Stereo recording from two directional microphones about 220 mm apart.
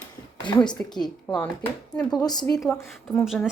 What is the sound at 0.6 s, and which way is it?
Speech, 5° left (ahead or behind).